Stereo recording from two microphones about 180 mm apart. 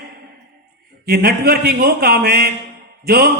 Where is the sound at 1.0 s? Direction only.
60° right (ahead or behind).